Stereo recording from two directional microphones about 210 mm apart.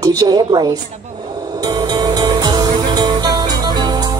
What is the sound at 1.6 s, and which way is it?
Music, 20° right (ahead or behind).